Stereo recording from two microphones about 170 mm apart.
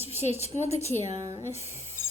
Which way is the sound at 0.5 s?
40° left (ahead or behind).